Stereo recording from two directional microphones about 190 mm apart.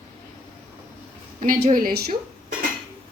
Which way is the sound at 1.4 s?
45° right (ahead or behind).